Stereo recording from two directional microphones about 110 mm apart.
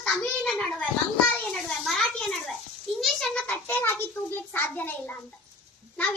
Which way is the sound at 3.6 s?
20° left (ahead or behind).